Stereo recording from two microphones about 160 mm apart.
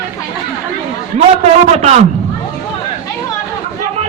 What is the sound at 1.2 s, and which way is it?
Speech, 45° right (ahead or behind).